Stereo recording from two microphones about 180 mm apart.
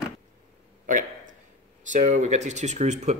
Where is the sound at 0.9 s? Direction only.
45° right (ahead or behind).